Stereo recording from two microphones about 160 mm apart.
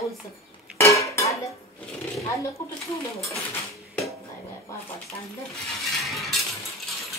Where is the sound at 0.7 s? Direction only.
20° left (ahead or behind).